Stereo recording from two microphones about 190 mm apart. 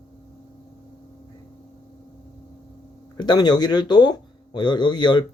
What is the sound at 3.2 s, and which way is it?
Speech, 20° left (ahead or behind).